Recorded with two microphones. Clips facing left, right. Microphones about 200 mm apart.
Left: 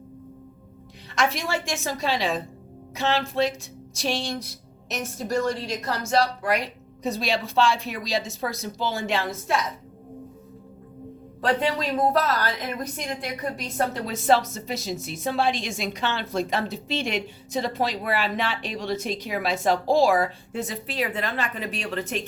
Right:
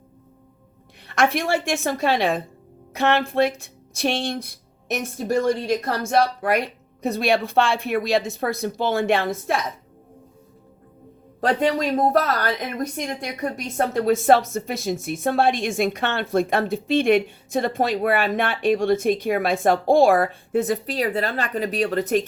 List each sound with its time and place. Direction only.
1.0 s a woman's voice: 55° right (ahead or behind)
11.3 s a woman's voice: 45° right (ahead or behind)
20.8 s speech: 40° right (ahead or behind)